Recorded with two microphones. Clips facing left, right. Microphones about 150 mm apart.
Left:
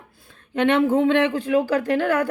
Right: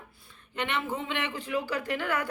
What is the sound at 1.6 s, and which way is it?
Speech, 45° left (ahead or behind).